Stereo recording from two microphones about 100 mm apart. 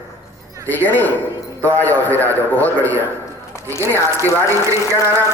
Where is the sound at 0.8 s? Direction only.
20° left (ahead or behind).